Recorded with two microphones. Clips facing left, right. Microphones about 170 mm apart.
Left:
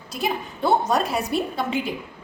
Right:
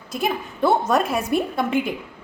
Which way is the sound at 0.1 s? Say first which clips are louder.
Right 2 dB; 50° right (ahead or behind).